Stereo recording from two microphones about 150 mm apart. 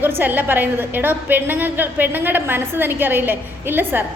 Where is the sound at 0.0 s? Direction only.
15° right (ahead or behind).